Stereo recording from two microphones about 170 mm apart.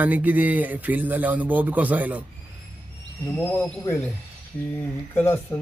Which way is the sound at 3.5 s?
10° left (ahead or behind).